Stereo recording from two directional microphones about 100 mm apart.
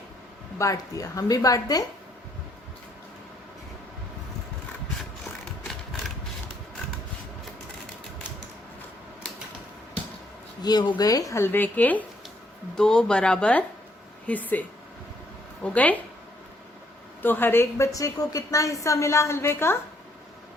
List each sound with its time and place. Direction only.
0.6 s speech: 35° left (ahead or behind)
10.6 s speech: 45° left (ahead or behind)
11.5 s speech: 15° left (ahead or behind)
15.6 s speech: 15° left (ahead or behind)
17.2 s a woman's voice: 20° left (ahead or behind)